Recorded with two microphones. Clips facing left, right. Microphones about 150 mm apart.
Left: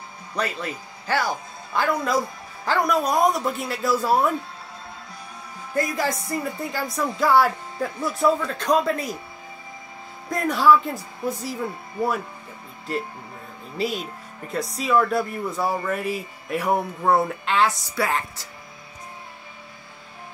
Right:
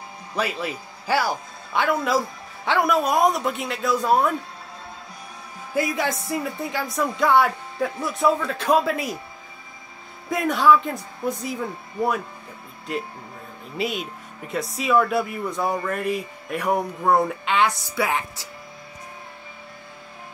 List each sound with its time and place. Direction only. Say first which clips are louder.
0.4 s a man's voice: right 1 dB; 10° right (ahead or behind)
5.8 s speech: even; centre (ahead or behind)
10.3 s speech: even; centre (ahead or behind)
13.7 s speech: left 1 dB; centre (ahead or behind)